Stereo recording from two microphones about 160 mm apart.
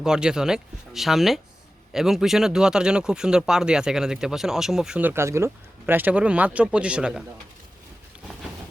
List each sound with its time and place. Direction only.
0.0 s speech: 5° right (ahead or behind)